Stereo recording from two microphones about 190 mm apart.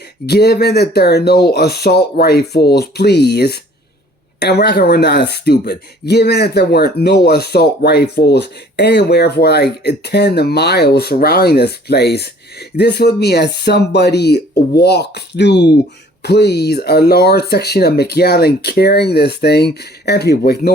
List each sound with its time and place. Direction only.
0.3 s speech: 60° left (ahead or behind)